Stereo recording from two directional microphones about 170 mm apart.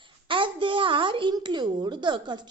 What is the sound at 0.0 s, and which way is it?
A woman's voice, 30° right (ahead or behind).